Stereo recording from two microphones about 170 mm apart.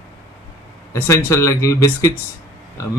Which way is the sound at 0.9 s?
15° left (ahead or behind).